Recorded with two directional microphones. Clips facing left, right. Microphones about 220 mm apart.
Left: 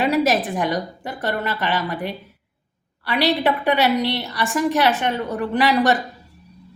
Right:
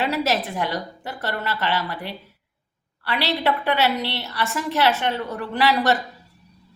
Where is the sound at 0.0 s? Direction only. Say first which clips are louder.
Left 5 dB; 15° left (ahead or behind).